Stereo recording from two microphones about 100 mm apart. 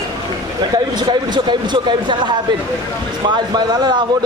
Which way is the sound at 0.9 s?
50° right (ahead or behind).